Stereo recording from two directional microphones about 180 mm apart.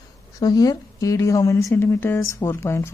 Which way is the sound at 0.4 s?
20° left (ahead or behind).